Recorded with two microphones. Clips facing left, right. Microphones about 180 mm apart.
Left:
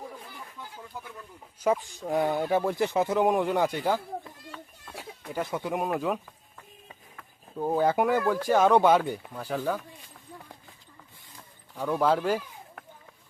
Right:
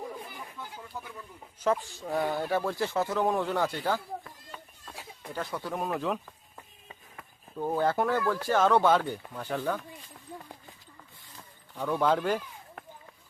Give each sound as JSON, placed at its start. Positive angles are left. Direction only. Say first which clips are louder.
{"t": 0.9, "sound": "speech", "louder": "right 1 dB", "side_deg": 10}
{"t": 5.3, "sound": "speech", "louder": "left 4 dB", "side_deg": 20}
{"t": 7.8, "sound": "speech", "louder": "left 3 dB", "side_deg": 15}
{"t": 11.7, "sound": "speech", "louder": "left 2 dB", "side_deg": 5}